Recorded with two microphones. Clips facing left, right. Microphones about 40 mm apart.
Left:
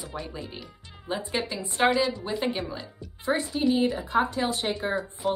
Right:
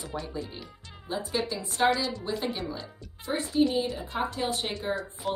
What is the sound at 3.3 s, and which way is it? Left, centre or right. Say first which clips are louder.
Speech: left 4 dB; left.